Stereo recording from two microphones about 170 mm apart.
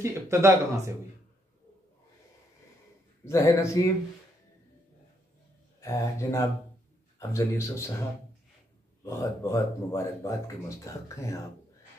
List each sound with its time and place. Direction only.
0.0 s speech: 15° right (ahead or behind)
3.3 s a man's voice: 20° left (ahead or behind)
5.8 s speech: 20° left (ahead or behind)
9.0 s speech: 20° left (ahead or behind)